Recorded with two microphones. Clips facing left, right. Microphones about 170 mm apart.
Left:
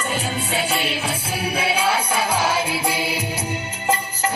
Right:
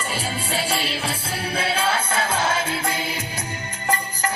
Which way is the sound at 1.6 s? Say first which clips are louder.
Left 2 dB; 25° right (ahead or behind).